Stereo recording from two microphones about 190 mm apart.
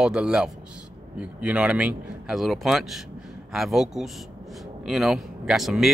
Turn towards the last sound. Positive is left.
turn(degrees=0)  # may be behind; listen again after turning